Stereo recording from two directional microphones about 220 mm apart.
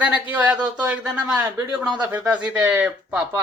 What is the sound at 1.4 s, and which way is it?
Speech, 20° right (ahead or behind).